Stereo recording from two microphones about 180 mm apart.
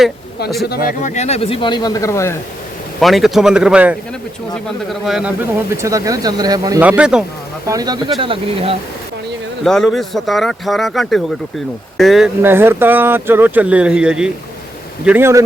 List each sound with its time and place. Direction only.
0.6 s speech: 60° left (ahead or behind); by 2.3 s 15° left (ahead or behind)
3.0 s speech: centre (ahead or behind)
5.7 s speech: 15° right (ahead or behind)
6.8 s speech: 5° right (ahead or behind)
7.7 s speech: 20° right (ahead or behind)
9.6 s speech: centre (ahead or behind)
12.4 s speech: 10° right (ahead or behind)